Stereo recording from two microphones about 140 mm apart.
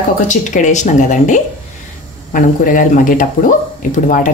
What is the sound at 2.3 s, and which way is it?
Speech, 75° left (ahead or behind).